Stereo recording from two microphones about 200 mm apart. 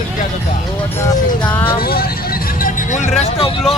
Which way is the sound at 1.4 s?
10° left (ahead or behind).